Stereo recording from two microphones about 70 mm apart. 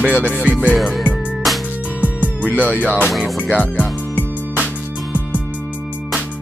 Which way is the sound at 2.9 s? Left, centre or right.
Centre.